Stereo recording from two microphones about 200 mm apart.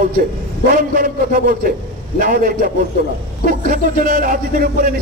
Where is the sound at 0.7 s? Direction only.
45° right (ahead or behind).